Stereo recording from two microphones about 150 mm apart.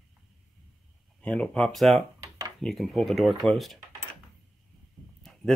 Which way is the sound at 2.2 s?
25° right (ahead or behind).